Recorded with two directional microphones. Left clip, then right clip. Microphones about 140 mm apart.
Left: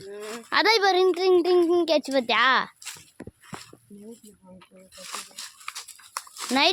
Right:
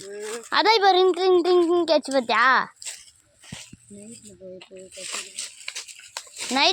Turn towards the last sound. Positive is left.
turn(degrees=-10)  # may be behind; listen again after turning